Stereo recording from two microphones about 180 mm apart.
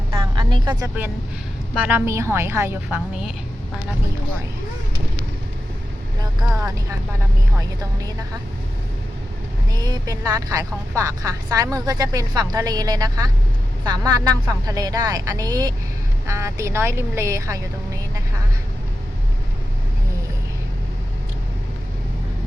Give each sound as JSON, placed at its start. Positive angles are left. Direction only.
{"t": 0.3, "sound": "speech", "side_deg": -25}
{"t": 1.7, "sound": "speech", "side_deg": -10}
{"t": 9.7, "sound": "a woman's voice", "side_deg": -20}